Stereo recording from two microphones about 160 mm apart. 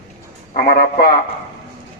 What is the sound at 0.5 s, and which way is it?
Speech, 70° left (ahead or behind).